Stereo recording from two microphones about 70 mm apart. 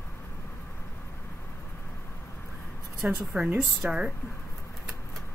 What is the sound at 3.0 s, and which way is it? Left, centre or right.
Speech, right.